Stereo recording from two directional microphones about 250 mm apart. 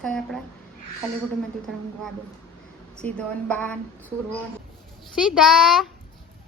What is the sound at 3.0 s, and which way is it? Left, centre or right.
Speech, centre.